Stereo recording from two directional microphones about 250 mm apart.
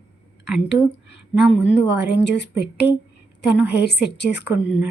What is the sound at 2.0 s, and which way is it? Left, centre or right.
Speech, left.